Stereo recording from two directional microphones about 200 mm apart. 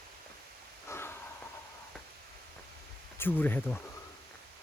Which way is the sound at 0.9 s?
10° left (ahead or behind).